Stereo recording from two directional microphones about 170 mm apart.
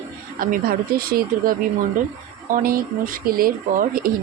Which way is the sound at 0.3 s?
55° right (ahead or behind).